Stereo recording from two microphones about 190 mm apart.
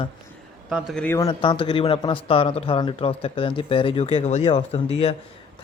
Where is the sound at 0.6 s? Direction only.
5° right (ahead or behind).